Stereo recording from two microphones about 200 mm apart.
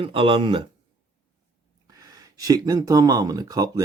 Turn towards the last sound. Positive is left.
turn(degrees=-20)  # may be behind; listen again after turning